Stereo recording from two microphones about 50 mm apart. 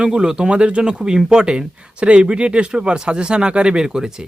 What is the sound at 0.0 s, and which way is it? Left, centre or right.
A man's voice, centre.